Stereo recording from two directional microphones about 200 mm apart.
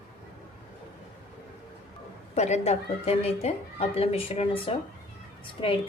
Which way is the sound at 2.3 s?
35° left (ahead or behind).